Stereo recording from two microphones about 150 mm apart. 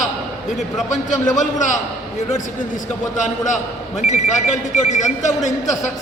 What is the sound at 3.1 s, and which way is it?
A man's voice, 55° left (ahead or behind).